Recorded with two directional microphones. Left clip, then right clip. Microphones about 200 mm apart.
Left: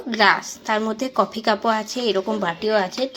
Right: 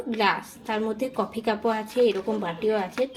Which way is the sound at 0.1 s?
25° left (ahead or behind).